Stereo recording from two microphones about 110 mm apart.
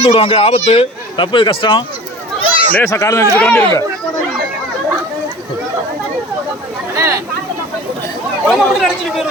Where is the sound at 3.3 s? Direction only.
15° left (ahead or behind).